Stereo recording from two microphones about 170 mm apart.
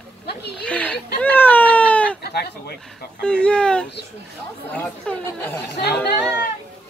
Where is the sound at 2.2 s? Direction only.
70° left (ahead or behind).